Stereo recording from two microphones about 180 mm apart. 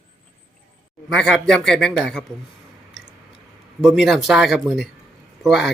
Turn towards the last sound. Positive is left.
turn(degrees=0)  # may be behind; listen again after turning